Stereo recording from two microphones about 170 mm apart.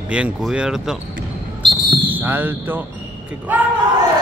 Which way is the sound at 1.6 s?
25° right (ahead or behind).